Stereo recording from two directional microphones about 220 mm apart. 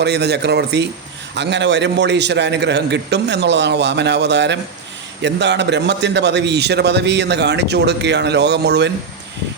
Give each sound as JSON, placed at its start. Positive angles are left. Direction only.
{"t": 0.0, "sound": "a man's voice", "side_deg": -50}